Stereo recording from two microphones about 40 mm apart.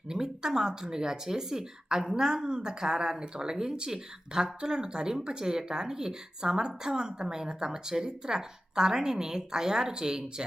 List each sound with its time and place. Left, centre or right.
0.1 s a woman's voice: centre